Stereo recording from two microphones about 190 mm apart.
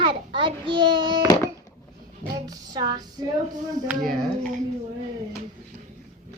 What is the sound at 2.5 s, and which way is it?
Speech, 20° right (ahead or behind).